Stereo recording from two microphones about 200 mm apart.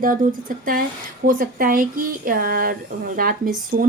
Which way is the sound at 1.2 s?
45° right (ahead or behind).